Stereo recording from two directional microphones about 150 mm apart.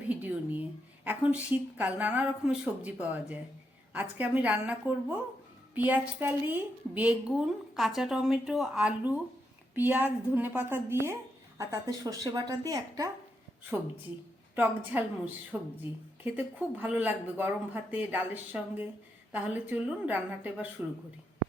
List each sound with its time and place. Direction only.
0.1 s a sound: 10° right (ahead or behind)
1.0 s a woman's voice: 10° right (ahead or behind)
5.7 s a woman's voice: 10° right (ahead or behind)
14.5 s a woman's voice: 10° right (ahead or behind)